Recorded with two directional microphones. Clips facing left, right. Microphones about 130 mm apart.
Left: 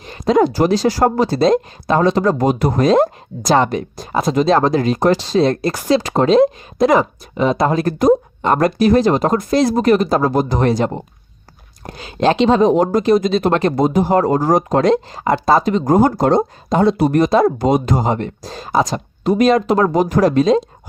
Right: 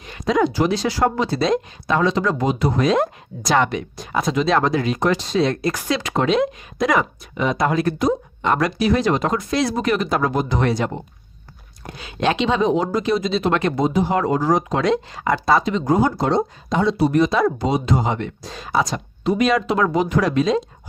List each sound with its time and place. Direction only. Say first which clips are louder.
0.0 s speech: left 5 dB; 35° left (ahead or behind)